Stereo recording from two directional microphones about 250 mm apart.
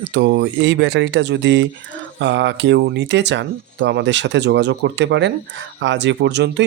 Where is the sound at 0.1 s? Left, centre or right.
Right.